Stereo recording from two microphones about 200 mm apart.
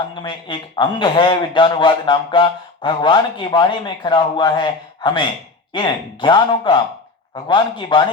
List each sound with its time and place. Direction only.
0.1 s a man's voice: 25° left (ahead or behind)